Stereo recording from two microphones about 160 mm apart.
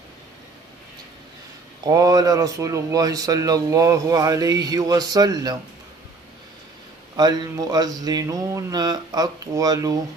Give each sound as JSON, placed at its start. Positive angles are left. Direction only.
{"t": 1.9, "sound": "speech", "side_deg": -20}
{"t": 7.2, "sound": "speech", "side_deg": -25}